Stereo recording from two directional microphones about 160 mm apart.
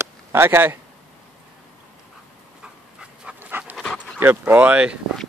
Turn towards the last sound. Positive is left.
turn(degrees=-10)  # may be behind; listen again after turning